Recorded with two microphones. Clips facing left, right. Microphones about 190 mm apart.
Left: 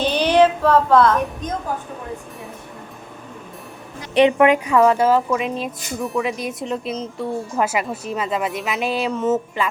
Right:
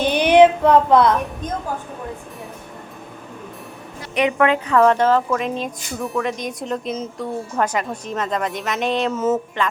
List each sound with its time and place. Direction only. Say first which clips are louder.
0.0 s child singing: right 3 dB; 15° right (ahead or behind)
4.1 s a woman's voice: left 5 dB; 30° left (ahead or behind)
4.4 s speech: left 2 dB; 15° left (ahead or behind); by 9.6 s centre (ahead or behind)